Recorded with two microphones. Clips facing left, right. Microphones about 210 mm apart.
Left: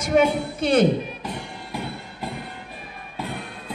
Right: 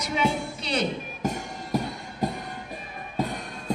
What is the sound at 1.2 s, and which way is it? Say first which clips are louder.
Music: right 3 dB; 45° right (ahead or behind).